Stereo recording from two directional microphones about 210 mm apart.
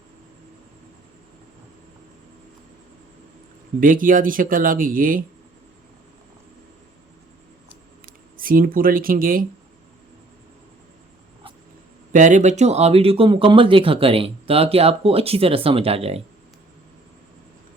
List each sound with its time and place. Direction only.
3.8 s speech: 40° right (ahead or behind)
8.0 s speech: 40° right (ahead or behind)
12.1 s speech: 35° right (ahead or behind)